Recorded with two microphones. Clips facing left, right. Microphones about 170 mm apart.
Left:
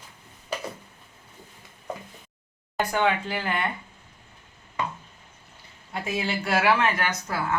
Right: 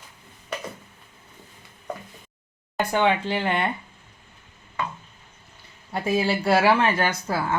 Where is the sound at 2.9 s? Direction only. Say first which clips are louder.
Right 4 dB; 25° right (ahead or behind).